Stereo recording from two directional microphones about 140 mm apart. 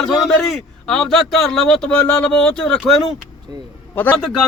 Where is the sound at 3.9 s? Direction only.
10° left (ahead or behind).